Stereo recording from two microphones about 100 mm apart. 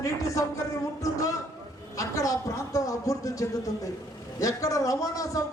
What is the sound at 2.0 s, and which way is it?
A man's voice, 30° left (ahead or behind).